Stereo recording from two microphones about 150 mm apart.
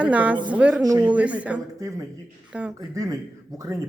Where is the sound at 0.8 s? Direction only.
25° right (ahead or behind).